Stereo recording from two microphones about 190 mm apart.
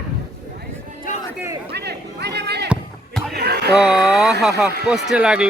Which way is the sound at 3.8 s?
5° right (ahead or behind).